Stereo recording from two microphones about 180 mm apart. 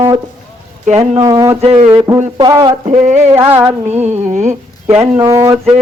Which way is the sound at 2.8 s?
40° right (ahead or behind).